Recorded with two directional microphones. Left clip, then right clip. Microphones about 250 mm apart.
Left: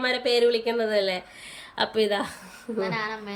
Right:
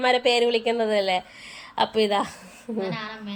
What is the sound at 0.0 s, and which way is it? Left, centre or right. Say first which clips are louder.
Speech: right 2 dB; centre.